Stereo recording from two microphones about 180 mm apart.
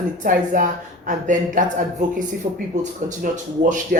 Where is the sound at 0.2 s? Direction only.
50° right (ahead or behind).